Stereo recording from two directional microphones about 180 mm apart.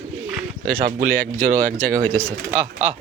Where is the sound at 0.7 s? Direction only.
55° right (ahead or behind).